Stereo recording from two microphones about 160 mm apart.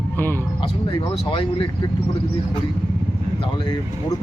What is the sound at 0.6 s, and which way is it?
Speech, 30° left (ahead or behind).